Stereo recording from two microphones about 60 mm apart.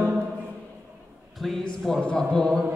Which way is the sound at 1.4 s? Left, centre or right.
Centre.